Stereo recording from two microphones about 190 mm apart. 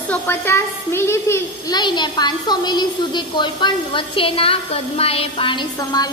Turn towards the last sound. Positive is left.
turn(degrees=20)  # may be behind; listen again after turning